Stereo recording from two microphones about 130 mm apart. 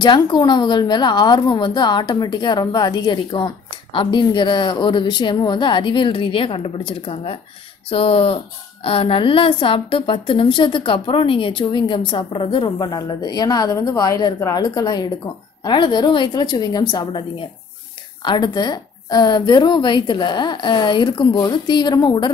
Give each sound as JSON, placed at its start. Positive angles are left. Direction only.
{"t": 0.0, "sound": "a woman's voice", "side_deg": 35}